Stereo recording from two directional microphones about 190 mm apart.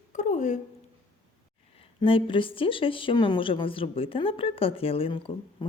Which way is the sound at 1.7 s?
30° left (ahead or behind).